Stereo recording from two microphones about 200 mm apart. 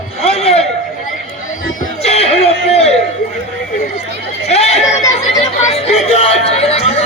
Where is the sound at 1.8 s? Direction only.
35° left (ahead or behind).